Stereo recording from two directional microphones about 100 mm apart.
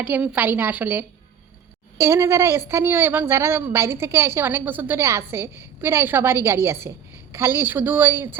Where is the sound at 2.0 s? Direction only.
30° right (ahead or behind).